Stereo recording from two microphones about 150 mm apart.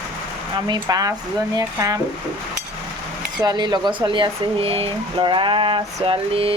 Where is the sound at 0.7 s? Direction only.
25° right (ahead or behind).